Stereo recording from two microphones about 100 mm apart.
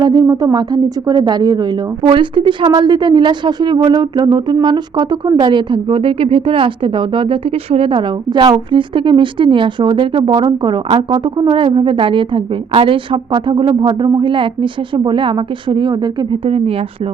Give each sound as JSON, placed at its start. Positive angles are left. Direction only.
{"t": 0.0, "sound": "a woman's voice", "side_deg": -40}
{"t": 2.0, "sound": "a woman's voice", "side_deg": -55}
{"t": 8.7, "sound": "a woman's voice", "side_deg": -55}
{"t": 16.5, "sound": "speech", "side_deg": -70}